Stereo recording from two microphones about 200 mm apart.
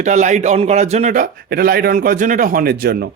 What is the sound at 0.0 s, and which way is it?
A man's voice, 35° right (ahead or behind).